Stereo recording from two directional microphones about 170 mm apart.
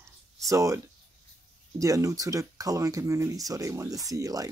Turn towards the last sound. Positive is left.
turn(degrees=-20)  # may be behind; listen again after turning